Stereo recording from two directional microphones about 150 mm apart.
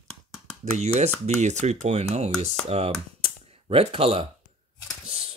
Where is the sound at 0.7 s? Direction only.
45° right (ahead or behind).